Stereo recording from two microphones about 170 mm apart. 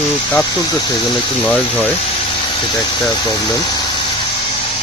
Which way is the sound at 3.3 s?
25° left (ahead or behind).